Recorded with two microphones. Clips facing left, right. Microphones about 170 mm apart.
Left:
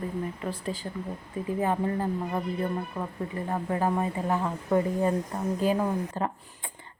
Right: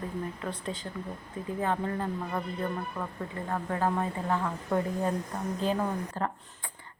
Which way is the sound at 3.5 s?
15° left (ahead or behind).